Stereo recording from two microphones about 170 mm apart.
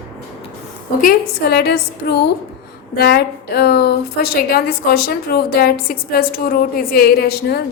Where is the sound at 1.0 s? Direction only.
70° left (ahead or behind).